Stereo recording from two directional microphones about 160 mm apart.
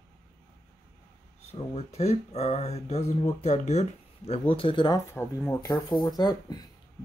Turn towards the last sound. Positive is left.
turn(degrees=25)  # may be behind; listen again after turning